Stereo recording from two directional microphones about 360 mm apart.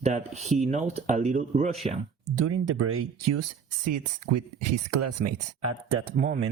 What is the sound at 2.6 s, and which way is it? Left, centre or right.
Speech, right.